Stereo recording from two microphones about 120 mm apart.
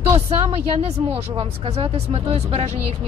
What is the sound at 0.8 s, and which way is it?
Speech, 55° right (ahead or behind).